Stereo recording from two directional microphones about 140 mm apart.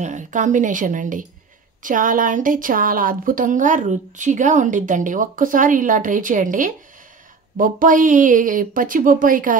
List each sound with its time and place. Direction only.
0.0 s a woman's voice: 60° right (ahead or behind); by 9.6 s 80° right